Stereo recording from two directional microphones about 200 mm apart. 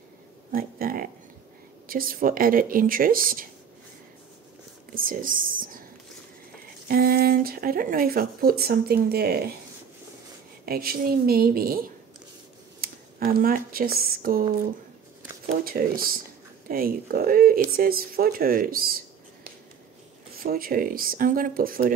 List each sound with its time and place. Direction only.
0.5 s speech: 45° right (ahead or behind)
4.9 s speech: 45° right (ahead or behind)
6.9 s speech: 50° right (ahead or behind)
10.6 s speech: 50° right (ahead or behind)
12.8 s speech: 45° right (ahead or behind)
15.4 s speech: 45° right (ahead or behind)
20.4 s speech: 45° right (ahead or behind)